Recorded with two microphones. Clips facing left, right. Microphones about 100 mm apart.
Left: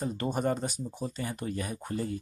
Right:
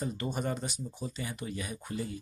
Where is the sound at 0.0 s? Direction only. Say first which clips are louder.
Left 4 dB; 45° left (ahead or behind).